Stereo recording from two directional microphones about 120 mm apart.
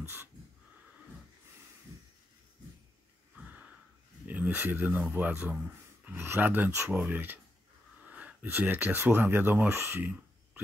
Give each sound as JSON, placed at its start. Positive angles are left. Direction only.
{"t": 4.3, "sound": "speech", "side_deg": -15}